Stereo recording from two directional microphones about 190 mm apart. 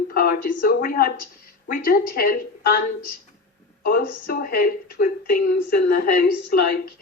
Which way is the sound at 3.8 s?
50° left (ahead or behind).